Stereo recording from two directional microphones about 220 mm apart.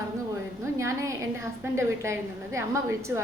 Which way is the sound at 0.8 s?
15° right (ahead or behind).